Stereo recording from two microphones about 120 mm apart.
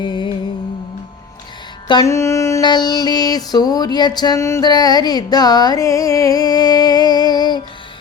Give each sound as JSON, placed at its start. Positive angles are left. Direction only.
{"t": 0.0, "sound": "music", "side_deg": 40}
{"t": 2.0, "sound": "mantra", "side_deg": 25}
{"t": 2.6, "sound": "music", "side_deg": 35}
{"t": 4.4, "sound": "music", "side_deg": 25}
{"t": 4.6, "sound": "music", "side_deg": 35}